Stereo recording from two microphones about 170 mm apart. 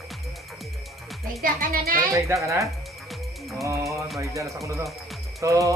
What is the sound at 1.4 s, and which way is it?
Speech, 60° right (ahead or behind).